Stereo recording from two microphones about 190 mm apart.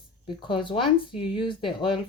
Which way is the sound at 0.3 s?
25° left (ahead or behind).